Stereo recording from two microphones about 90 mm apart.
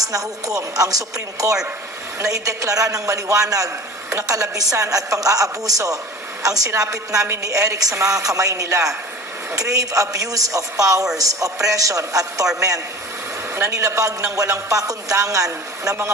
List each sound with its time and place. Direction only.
0.0 s a woman's voice: 40° right (ahead or behind)